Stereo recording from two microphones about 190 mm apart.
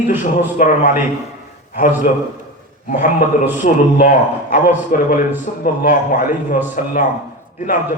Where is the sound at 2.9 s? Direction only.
40° left (ahead or behind).